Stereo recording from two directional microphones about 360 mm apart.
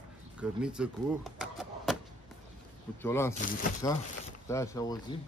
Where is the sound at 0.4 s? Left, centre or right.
Centre.